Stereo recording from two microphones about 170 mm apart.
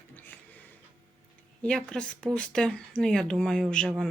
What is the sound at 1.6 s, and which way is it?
Speech, 5° left (ahead or behind).